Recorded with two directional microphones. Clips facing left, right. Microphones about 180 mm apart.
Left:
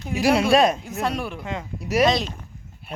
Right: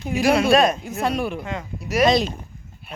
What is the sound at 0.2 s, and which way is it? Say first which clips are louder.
Speech: right 1 dB; 30° left (ahead or behind).